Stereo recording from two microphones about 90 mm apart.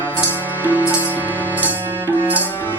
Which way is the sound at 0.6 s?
20° right (ahead or behind).